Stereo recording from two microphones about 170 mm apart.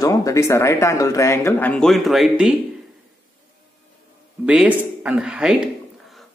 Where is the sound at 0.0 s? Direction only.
20° left (ahead or behind); by 2.5 s centre (ahead or behind).